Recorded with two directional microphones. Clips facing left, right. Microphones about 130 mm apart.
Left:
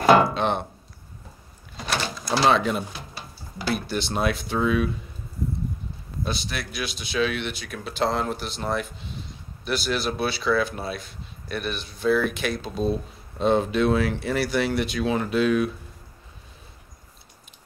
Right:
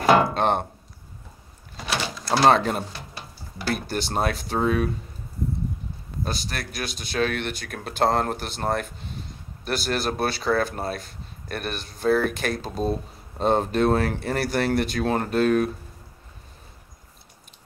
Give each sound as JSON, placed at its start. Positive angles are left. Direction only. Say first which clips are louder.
{"t": 0.3, "sound": "chopping", "louder": "right 2 dB", "side_deg": -50}
{"t": 2.4, "sound": "speech", "louder": "right 2 dB", "side_deg": -45}
{"t": 6.2, "sound": "speech", "louder": "left 1 dB", "side_deg": -45}